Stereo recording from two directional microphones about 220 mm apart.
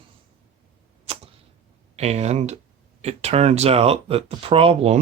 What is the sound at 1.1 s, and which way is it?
Cat, 25° right (ahead or behind).